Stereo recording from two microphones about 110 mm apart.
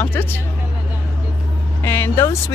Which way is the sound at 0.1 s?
15° left (ahead or behind).